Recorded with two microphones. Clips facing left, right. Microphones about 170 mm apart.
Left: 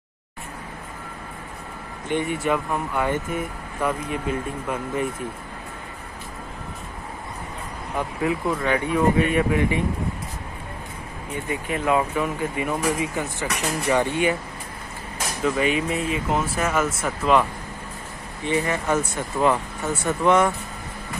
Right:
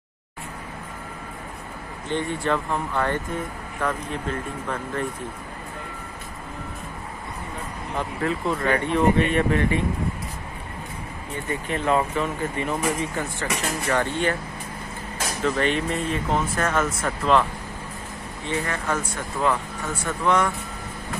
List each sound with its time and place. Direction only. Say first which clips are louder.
2.0 s speech: left 2 dB; 15° left (ahead or behind)
8.2 s speech: left 1 dB; 10° left (ahead or behind)
11.4 s speech: even; 10° left (ahead or behind)
15.4 s speech: left 1 dB; 5° left (ahead or behind)
18.5 s speech: left 4 dB; 10° left (ahead or behind)
19.4 s speech: left 3 dB; 25° left (ahead or behind)